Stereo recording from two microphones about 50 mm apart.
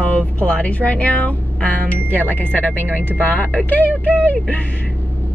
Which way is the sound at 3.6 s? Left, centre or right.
Left.